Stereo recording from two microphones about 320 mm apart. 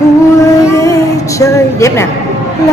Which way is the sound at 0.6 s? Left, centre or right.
Centre.